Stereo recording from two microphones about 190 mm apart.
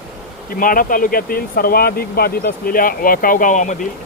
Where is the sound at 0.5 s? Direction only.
45° left (ahead or behind).